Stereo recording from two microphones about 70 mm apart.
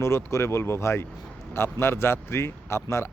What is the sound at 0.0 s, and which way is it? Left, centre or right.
Speech, left.